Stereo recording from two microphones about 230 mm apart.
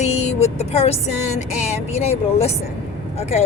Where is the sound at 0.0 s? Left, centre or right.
Left.